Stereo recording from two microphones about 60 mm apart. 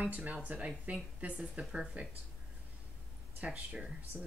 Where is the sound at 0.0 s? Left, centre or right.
Right.